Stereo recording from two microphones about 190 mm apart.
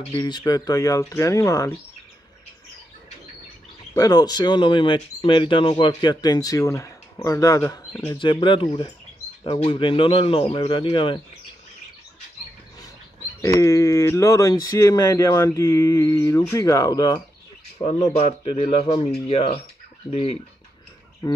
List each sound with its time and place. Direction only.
0.2 s speech: 20° left (ahead or behind)
3.9 s speech: 20° left (ahead or behind)
13.6 s speech: 15° left (ahead or behind)
17.7 s speech: 35° left (ahead or behind)